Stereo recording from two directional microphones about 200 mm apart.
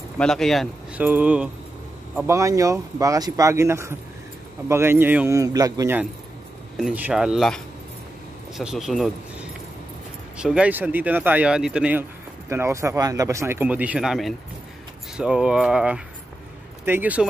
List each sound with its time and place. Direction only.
0.2 s speech: centre (ahead or behind)